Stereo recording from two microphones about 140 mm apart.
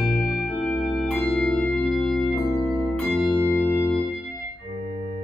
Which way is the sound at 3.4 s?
15° left (ahead or behind).